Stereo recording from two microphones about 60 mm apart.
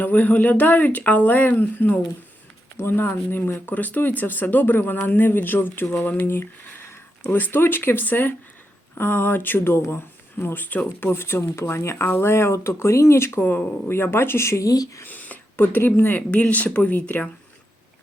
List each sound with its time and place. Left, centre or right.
0.0 s speech: left
15.0 s a sound: left
16.0 s speech: left